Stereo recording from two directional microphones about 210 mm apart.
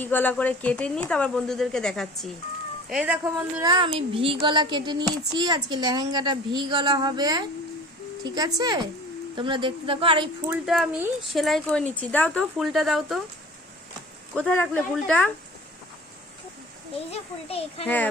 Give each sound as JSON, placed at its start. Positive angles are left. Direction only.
{"t": 0.0, "sound": "speech", "side_deg": 10}
{"t": 3.6, "sound": "speech", "side_deg": -20}
{"t": 10.5, "sound": "speech", "side_deg": -5}
{"t": 14.3, "sound": "speech", "side_deg": 5}
{"t": 17.1, "sound": "a child's voice", "side_deg": 30}
{"t": 17.8, "sound": "a child's voice", "side_deg": 10}